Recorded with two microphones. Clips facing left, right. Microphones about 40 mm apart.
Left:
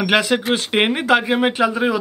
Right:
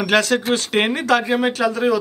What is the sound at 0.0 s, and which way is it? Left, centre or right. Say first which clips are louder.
Speech: even; centre.